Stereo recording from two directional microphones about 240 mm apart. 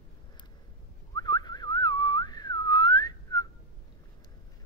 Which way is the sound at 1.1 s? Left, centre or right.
Centre.